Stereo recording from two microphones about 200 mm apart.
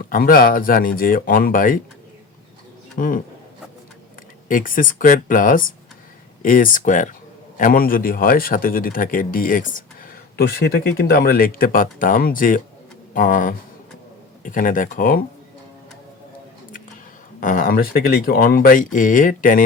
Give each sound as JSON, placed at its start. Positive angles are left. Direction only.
{"t": 0.0, "sound": "a man's voice", "side_deg": 45}
{"t": 3.0, "sound": "speech", "side_deg": 40}
{"t": 4.4, "sound": "a man's voice", "side_deg": 40}
{"t": 10.3, "sound": "a man's voice", "side_deg": 50}
{"t": 17.4, "sound": "a man's voice", "side_deg": 45}